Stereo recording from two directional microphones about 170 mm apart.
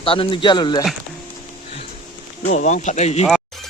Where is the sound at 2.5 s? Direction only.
45° left (ahead or behind).